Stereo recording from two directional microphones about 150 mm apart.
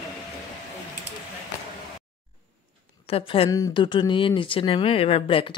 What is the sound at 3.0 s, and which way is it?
Speech, 40° left (ahead or behind).